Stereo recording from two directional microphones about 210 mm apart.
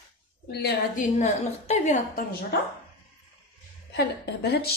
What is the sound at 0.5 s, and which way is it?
A woman's voice, 50° left (ahead or behind).